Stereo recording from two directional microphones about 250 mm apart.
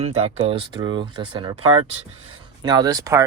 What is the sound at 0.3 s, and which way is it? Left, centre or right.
Speech, right.